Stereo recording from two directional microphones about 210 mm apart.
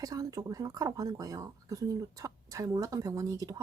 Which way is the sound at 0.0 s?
15° right (ahead or behind).